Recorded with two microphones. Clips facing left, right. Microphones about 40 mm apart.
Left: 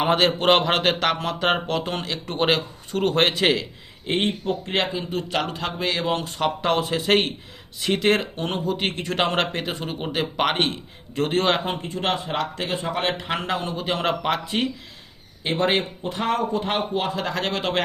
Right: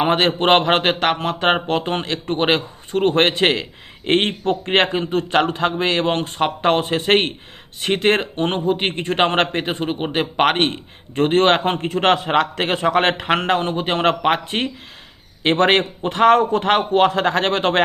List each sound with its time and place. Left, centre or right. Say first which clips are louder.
0.0 s a man's voice: right 2 dB; right
4.0 s a man's voice: right 5 dB; right
5.1 s speech: right 9 dB; right
15.4 s a man's voice: right 6 dB; right